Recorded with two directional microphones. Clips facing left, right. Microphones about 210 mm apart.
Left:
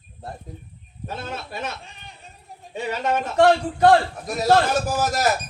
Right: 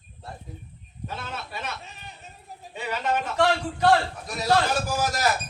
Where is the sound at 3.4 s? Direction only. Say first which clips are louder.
Left 7 dB; 50° left (ahead or behind).